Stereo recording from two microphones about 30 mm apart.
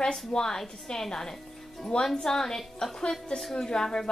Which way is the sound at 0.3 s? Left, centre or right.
Left.